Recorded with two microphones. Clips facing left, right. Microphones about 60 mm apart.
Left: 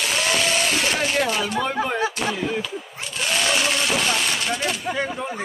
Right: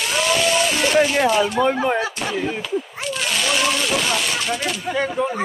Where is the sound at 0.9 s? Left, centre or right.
Centre.